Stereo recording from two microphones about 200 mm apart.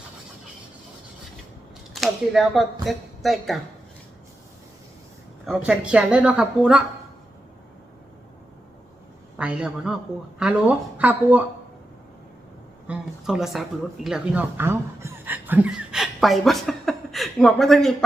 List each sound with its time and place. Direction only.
1.9 s a woman's voice: centre (ahead or behind)
5.5 s speech: 5° right (ahead or behind)
9.4 s speech: 5° right (ahead or behind)
12.9 s speech: 5° right (ahead or behind)